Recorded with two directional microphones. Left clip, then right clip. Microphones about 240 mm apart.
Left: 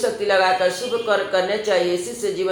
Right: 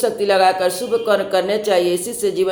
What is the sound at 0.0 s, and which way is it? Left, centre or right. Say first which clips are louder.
Speech: right 3 dB; right.